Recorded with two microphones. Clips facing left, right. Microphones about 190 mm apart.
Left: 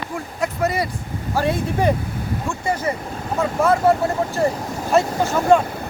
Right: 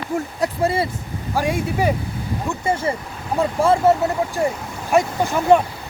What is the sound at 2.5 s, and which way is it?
Speech, 25° right (ahead or behind).